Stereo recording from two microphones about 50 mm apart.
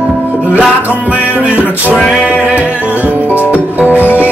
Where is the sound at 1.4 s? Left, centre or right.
Right.